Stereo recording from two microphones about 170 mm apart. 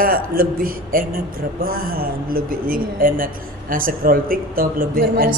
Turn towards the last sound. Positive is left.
turn(degrees=-60)  # may be behind; listen again after turning